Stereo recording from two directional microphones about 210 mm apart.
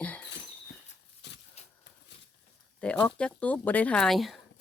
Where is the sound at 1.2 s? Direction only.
55° left (ahead or behind).